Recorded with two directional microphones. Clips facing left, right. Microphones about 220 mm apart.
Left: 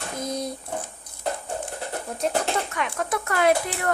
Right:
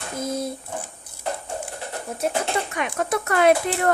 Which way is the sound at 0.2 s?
5° right (ahead or behind).